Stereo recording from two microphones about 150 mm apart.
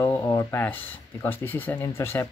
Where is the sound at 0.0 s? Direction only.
20° left (ahead or behind).